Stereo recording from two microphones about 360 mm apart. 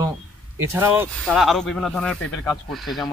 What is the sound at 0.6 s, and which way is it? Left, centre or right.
Speech, centre.